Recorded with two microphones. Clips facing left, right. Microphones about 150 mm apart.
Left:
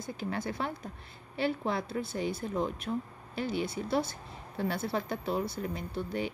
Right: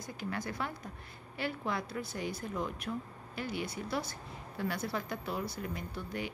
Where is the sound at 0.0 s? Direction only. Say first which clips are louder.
Left 4 dB; 25° left (ahead or behind).